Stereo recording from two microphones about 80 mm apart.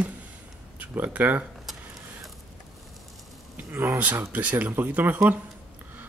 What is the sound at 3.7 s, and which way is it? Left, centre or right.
Speech, right.